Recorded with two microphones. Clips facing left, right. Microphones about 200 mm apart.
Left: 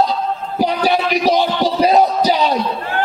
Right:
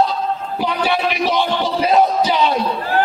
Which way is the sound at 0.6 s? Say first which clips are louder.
Left 3 dB; 40° left (ahead or behind).